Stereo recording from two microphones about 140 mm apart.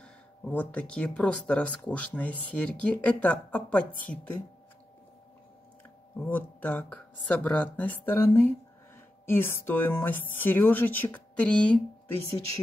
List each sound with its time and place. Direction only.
0.0 s speech: 10° left (ahead or behind)
6.2 s speech: 10° left (ahead or behind)